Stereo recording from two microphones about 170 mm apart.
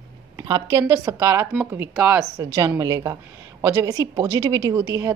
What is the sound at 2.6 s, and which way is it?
A woman's voice, 20° right (ahead or behind).